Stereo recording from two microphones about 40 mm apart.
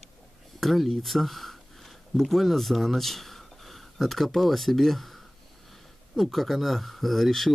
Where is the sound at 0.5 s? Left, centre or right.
Centre.